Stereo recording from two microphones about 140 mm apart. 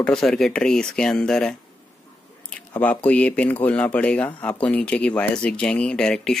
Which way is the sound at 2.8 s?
10° left (ahead or behind).